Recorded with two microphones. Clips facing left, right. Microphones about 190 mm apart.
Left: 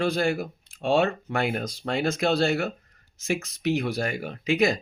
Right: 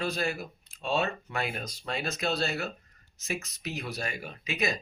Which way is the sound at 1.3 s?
75° left (ahead or behind).